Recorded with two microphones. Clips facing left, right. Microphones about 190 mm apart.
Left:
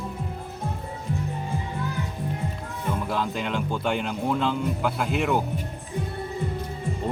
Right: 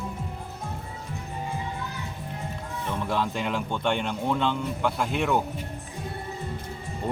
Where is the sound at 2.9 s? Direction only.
Centre (ahead or behind).